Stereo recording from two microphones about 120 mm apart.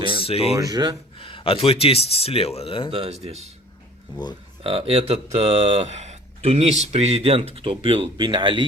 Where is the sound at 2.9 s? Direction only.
60° right (ahead or behind).